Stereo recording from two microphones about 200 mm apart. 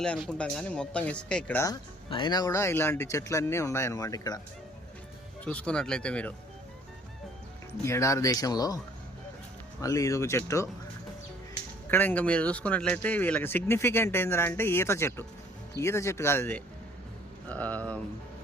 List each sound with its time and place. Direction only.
0.0 s speech: 5° left (ahead or behind)
5.5 s speech: 5° left (ahead or behind)
7.9 s speech: 15° left (ahead or behind)
9.8 s speech: 15° left (ahead or behind)
11.9 s speech: 10° left (ahead or behind)